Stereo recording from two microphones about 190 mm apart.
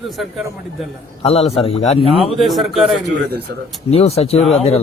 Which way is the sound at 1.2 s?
30° left (ahead or behind).